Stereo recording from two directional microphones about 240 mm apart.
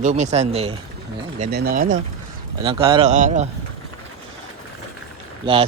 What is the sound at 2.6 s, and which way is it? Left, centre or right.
Speech, right.